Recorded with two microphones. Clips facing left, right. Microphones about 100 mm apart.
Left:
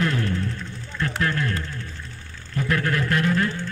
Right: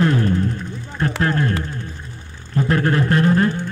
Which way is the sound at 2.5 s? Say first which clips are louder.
Right 6 dB; 30° right (ahead or behind).